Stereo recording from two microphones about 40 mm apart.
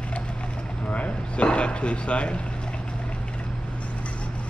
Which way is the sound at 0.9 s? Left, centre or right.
Left.